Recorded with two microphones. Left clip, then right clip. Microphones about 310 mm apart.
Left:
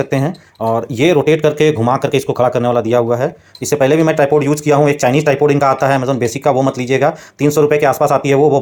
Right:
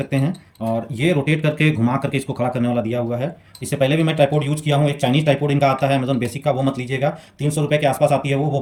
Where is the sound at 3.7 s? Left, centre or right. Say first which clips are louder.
Left 7 dB; left.